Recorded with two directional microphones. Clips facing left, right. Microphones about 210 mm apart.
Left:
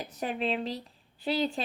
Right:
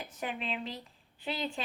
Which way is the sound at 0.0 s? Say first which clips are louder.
Left 6 dB; 35° left (ahead or behind).